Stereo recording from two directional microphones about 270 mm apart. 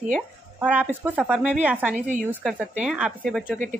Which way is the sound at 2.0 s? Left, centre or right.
Right.